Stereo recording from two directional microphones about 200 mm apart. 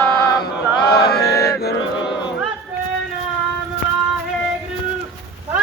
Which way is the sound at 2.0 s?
25° left (ahead or behind).